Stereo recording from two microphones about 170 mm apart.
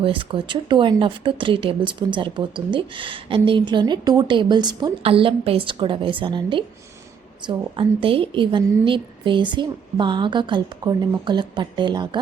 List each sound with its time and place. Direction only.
0.0 s speech: 30° right (ahead or behind)